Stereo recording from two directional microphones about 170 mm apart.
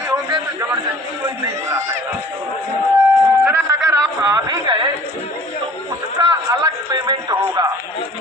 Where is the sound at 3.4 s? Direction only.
15° right (ahead or behind).